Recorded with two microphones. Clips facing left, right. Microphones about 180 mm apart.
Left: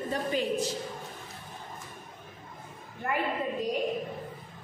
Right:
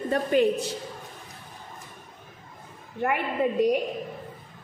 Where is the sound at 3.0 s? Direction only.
70° right (ahead or behind).